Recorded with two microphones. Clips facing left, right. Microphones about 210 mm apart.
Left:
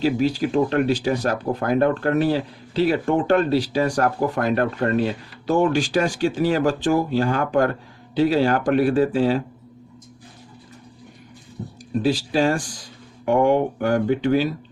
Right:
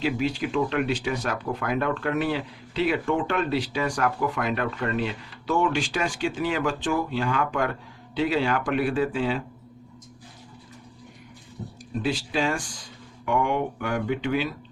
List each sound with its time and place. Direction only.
0.0 s speech: 35° left (ahead or behind)
12.0 s speech: 40° left (ahead or behind)